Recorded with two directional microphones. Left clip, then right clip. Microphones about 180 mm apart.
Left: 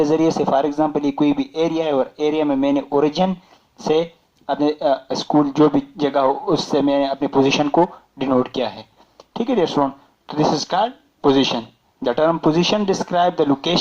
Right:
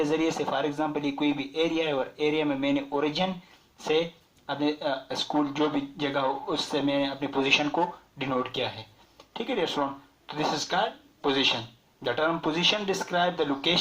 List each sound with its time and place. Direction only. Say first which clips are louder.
0.0 s speech: left 10 dB; 45° left (ahead or behind)